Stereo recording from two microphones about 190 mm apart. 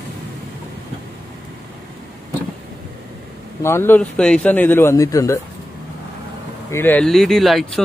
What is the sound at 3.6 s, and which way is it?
Speech, 10° left (ahead or behind).